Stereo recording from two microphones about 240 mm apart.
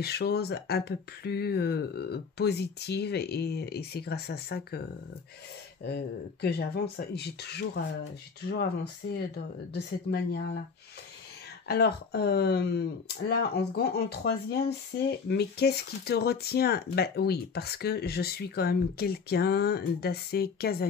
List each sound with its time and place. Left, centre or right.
0.0 s speech: left
5.9 s speech: left
11.6 s speech: left